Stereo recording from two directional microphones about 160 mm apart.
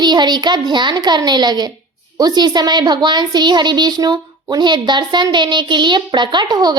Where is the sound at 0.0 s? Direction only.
25° right (ahead or behind).